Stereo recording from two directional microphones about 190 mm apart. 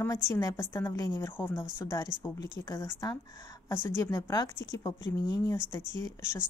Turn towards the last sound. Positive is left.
turn(degrees=15)  # may be behind; listen again after turning